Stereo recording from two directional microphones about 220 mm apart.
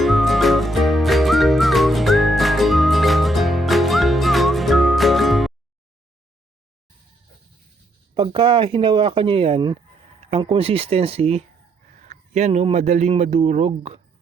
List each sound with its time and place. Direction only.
0.0 s music: centre (ahead or behind)
8.1 s a man's voice: 20° right (ahead or behind)